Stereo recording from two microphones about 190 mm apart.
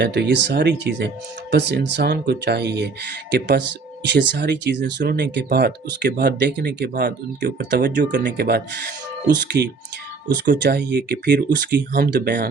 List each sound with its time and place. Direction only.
0.0 s speech: 60° right (ahead or behind)
8.1 s speech: 65° right (ahead or behind)